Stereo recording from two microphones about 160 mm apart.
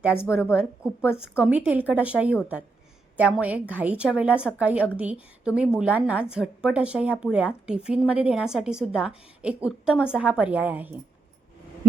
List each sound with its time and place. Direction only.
0.1 s a woman's voice: 15° left (ahead or behind)
0.5 s a woman's voice: 5° right (ahead or behind)